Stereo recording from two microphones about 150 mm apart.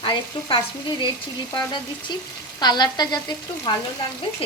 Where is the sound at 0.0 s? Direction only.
30° left (ahead or behind).